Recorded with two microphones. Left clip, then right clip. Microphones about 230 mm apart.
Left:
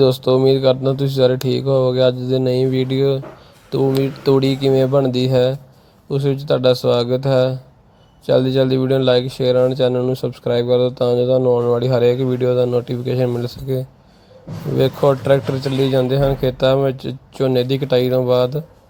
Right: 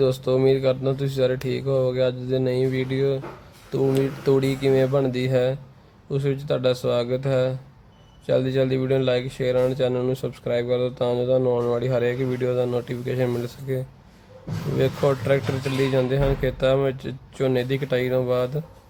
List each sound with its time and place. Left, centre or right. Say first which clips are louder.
0.0 s speech: left 6 dB; centre